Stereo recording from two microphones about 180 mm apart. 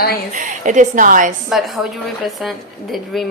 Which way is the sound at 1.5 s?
Centre (ahead or behind).